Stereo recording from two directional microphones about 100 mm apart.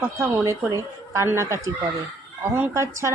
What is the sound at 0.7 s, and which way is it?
Speech, 30° right (ahead or behind).